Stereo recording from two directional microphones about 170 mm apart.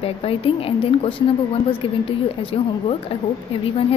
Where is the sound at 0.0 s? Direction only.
35° left (ahead or behind).